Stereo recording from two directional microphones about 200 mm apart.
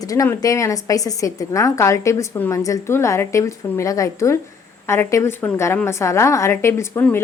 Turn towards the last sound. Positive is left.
turn(degrees=10)  # may be behind; listen again after turning